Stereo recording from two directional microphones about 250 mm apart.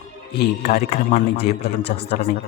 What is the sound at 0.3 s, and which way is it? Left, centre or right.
Speech, left.